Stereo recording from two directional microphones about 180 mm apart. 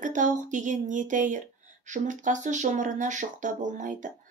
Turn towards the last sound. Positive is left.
turn(degrees=-45)  # may be behind; listen again after turning